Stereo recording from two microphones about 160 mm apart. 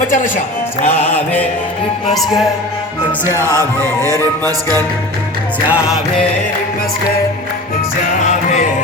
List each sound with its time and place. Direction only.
0.1 s speech: 50° left (ahead or behind)
3.3 s music: 15° right (ahead or behind)
5.6 s music: 10° right (ahead or behind)